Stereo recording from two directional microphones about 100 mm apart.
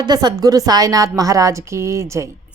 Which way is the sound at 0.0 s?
45° right (ahead or behind).